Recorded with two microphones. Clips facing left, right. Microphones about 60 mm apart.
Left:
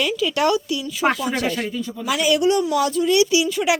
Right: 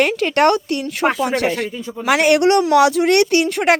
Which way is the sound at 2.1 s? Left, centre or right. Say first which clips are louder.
Right 5 dB; right.